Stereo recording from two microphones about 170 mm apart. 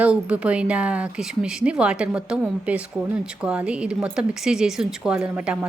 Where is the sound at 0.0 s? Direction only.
5° right (ahead or behind).